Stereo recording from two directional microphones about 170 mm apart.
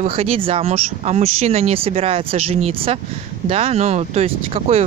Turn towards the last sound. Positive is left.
turn(degrees=-35)  # may be behind; listen again after turning